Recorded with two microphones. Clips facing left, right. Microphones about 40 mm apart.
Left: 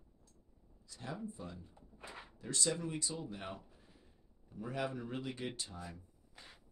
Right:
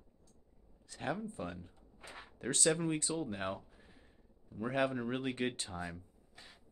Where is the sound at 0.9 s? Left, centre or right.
Right.